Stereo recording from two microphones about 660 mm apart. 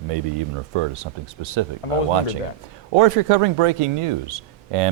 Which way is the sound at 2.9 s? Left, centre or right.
Right.